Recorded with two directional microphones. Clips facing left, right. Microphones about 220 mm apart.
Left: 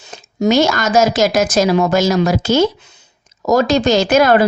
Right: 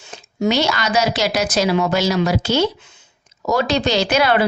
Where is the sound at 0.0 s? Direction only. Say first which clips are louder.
Left 3 dB; 40° left (ahead or behind).